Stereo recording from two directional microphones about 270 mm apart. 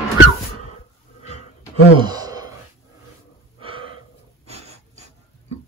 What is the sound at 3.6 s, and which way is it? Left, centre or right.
Gasp, centre.